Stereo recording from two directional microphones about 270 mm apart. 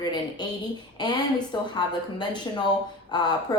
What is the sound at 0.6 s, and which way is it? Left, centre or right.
A woman's voice, centre.